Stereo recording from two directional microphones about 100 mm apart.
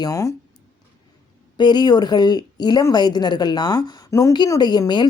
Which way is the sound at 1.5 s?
45° left (ahead or behind).